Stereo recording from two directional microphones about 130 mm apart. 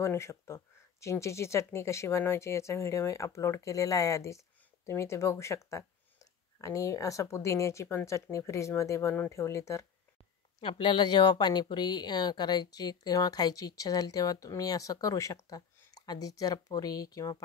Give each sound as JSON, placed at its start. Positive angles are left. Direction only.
{"t": 0.0, "sound": "speech", "side_deg": 20}
{"t": 10.6, "sound": "speech", "side_deg": 40}